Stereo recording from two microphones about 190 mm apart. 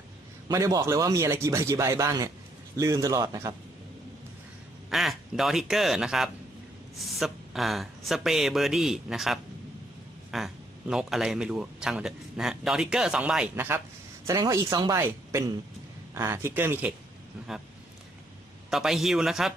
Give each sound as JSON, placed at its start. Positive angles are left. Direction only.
{"t": 0.4, "sound": "a man's voice", "side_deg": -20}
{"t": 4.9, "sound": "a man's voice", "side_deg": 0}
{"t": 18.7, "sound": "a man's voice", "side_deg": 0}